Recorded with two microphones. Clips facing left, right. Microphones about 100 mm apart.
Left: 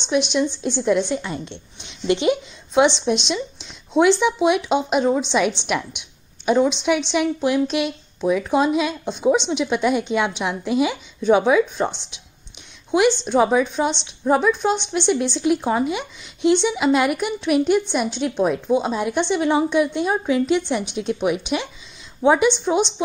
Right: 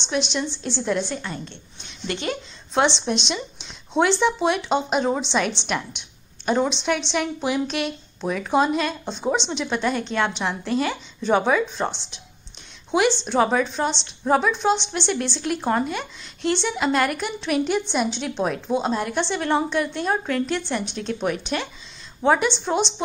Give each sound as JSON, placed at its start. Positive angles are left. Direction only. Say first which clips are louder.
{"t": 0.0, "sound": "speech", "louder": "left 5 dB", "side_deg": 10}
{"t": 1.3, "sound": "a woman's voice", "louder": "left 4 dB", "side_deg": 25}
{"t": 2.7, "sound": "a woman's voice", "louder": "left 4 dB", "side_deg": 5}